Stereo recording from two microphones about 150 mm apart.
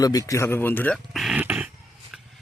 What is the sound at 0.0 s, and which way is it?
Speech, 25° left (ahead or behind).